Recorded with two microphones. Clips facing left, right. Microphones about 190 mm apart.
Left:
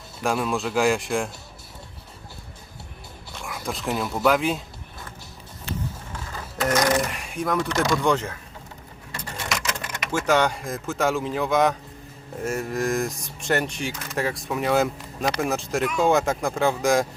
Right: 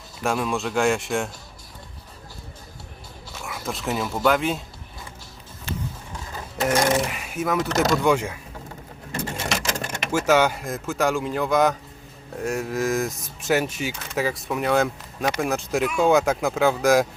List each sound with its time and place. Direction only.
0.2 s speech: centre (ahead or behind)
3.3 s speech: centre (ahead or behind)
6.3 s sewing machine: 15° right (ahead or behind)
7.1 s speech: 5° right (ahead or behind)
9.1 s a sound: 25° right (ahead or behind)
10.1 s speech: 5° right (ahead or behind)